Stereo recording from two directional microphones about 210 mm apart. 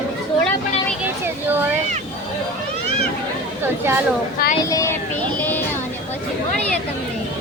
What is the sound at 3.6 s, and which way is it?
Speech, 10° right (ahead or behind).